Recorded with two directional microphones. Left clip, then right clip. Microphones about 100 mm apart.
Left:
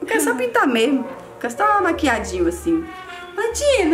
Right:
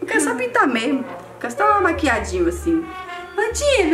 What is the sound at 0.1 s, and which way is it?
A woman's voice, 20° left (ahead or behind).